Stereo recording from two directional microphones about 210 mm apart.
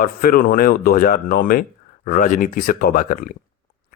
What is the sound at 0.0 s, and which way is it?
A man's voice, 45° left (ahead or behind).